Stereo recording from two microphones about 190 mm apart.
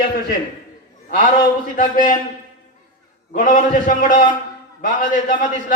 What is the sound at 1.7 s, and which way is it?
Speech, 45° left (ahead or behind).